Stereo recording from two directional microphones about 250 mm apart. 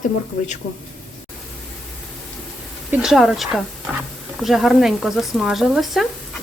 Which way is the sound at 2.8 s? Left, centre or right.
Centre.